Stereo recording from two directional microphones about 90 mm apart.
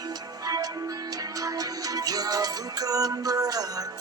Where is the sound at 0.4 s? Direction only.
45° right (ahead or behind).